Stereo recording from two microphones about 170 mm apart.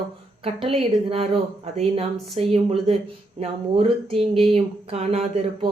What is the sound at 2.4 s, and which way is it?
Speech, 35° right (ahead or behind).